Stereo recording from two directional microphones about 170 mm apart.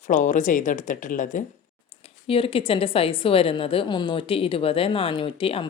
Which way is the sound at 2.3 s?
35° left (ahead or behind).